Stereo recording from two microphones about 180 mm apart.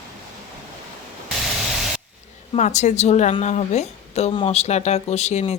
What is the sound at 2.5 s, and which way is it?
A woman's voice, 40° left (ahead or behind).